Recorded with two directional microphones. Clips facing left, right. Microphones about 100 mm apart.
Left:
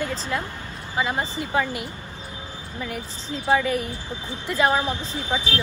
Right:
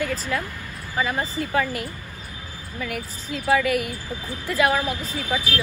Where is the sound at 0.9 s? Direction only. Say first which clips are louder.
Even; 25° left (ahead or behind).